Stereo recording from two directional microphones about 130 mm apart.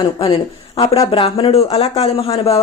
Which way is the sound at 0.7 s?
50° left (ahead or behind).